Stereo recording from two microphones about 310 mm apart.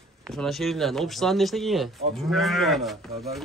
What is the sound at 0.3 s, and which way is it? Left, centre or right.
Speech, centre.